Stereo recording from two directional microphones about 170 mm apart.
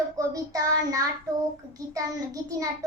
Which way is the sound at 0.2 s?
20° right (ahead or behind).